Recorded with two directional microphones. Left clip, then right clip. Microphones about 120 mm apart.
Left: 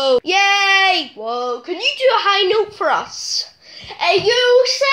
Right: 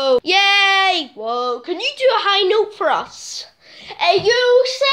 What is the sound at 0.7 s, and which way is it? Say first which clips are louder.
Child singing: left 1 dB; 40° right (ahead or behind).